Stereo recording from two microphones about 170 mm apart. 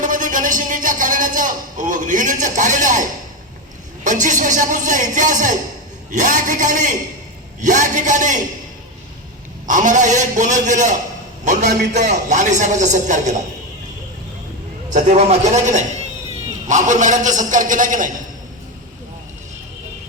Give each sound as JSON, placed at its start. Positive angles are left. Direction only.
{"t": 0.0, "sound": "a man's voice", "side_deg": -50}
{"t": 9.6, "sound": "a man's voice", "side_deg": -50}
{"t": 12.0, "sound": "a man's voice", "side_deg": -45}
{"t": 14.9, "sound": "a man's voice", "side_deg": -45}